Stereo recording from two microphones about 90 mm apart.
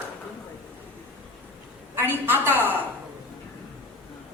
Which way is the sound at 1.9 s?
25° right (ahead or behind).